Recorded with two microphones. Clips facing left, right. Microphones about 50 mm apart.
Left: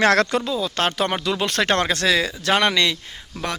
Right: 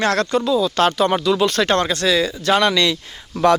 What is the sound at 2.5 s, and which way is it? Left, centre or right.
Speech, left.